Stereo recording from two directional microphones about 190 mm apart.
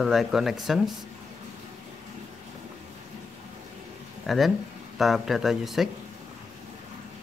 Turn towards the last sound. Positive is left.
turn(degrees=0)  # may be behind; listen again after turning